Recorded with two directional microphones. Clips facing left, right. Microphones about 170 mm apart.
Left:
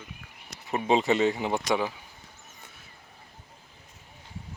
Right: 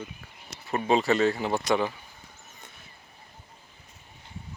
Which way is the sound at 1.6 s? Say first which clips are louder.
Right 2 dB; centre (ahead or behind).